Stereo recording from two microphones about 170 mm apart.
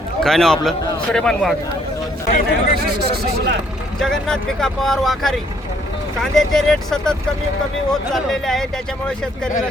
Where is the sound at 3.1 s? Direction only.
70° right (ahead or behind).